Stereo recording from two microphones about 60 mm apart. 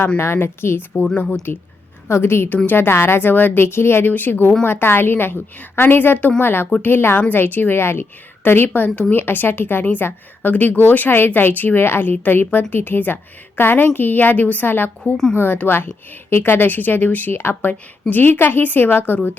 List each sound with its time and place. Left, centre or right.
0.2 s a woman's voice: left
1.1 s speech: left
2.0 s a woman's voice: left
15.0 s speech: centre
15.4 s a woman's voice: left